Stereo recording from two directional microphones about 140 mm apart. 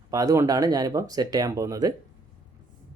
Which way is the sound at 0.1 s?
25° right (ahead or behind).